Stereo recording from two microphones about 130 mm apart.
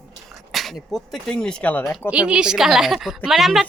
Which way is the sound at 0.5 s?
Centre (ahead or behind).